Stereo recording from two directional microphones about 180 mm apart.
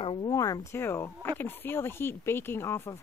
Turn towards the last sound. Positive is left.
turn(degrees=15)  # may be behind; listen again after turning